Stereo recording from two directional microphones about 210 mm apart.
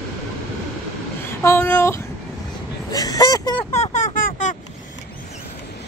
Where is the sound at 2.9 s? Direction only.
15° left (ahead or behind).